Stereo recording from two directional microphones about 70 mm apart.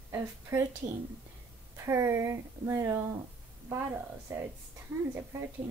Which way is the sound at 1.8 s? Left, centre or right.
Right.